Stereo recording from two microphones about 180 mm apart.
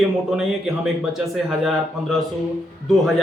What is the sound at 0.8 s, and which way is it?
Speech, centre (ahead or behind).